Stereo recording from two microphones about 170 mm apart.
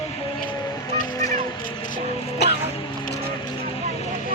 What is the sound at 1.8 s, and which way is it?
Music, 25° left (ahead or behind).